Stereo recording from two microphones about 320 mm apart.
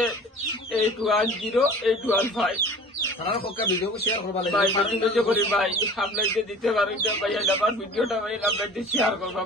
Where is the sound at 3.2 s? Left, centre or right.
Left.